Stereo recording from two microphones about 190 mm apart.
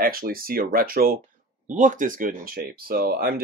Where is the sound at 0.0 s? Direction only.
50° right (ahead or behind).